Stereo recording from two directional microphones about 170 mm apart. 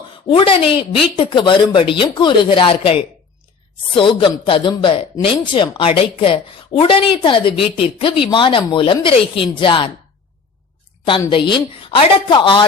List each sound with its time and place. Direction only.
0.3 s a woman's voice: 30° left (ahead or behind)
11.2 s a woman's voice: 25° left (ahead or behind)